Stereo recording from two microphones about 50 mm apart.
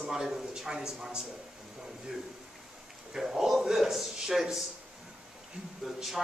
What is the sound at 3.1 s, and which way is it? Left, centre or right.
A man's voice, centre.